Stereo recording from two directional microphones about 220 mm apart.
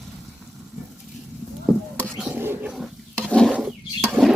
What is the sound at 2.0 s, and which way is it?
Roaring cats, centre (ahead or behind).